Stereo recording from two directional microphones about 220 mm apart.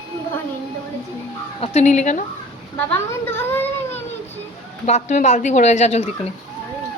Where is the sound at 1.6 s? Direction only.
30° left (ahead or behind).